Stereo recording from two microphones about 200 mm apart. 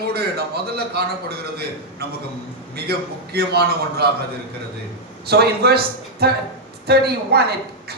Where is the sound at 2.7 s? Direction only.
50° right (ahead or behind).